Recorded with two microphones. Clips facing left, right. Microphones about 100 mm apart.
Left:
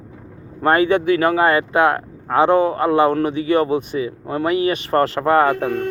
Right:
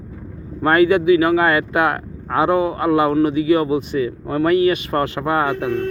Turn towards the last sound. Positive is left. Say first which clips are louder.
# left 3 dB
turn(degrees=45)  # may be behind; listen again after turning